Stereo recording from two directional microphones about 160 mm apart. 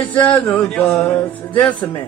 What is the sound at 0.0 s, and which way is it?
A man's voice, 10° left (ahead or behind).